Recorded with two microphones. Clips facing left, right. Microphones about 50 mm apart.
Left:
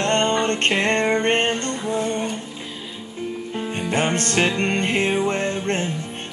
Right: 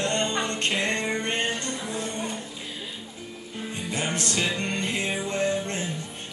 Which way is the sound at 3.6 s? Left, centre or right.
Left.